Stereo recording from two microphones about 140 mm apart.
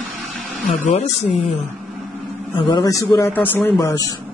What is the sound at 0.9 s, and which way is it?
Speech, 45° left (ahead or behind).